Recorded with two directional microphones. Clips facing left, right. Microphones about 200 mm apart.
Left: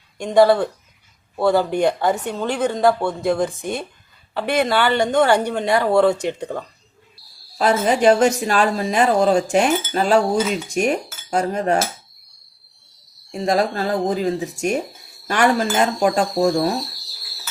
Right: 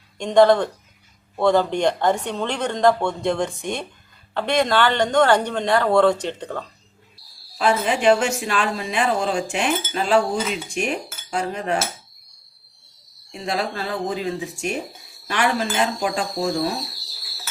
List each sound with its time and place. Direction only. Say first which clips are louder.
0.2 s a woman's voice: even; 5° left (ahead or behind)
7.6 s speech: left 3 dB; 40° left (ahead or behind)
13.3 s speech: left 6 dB; 45° left (ahead or behind)